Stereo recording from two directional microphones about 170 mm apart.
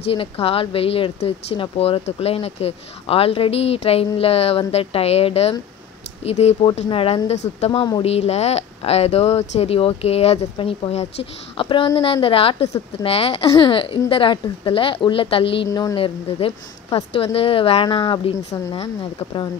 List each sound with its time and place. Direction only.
0.1 s speech: 35° left (ahead or behind)
16.3 s speech: 35° left (ahead or behind)